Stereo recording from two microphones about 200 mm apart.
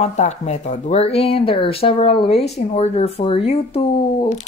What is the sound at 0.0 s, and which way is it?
Speech, 35° left (ahead or behind).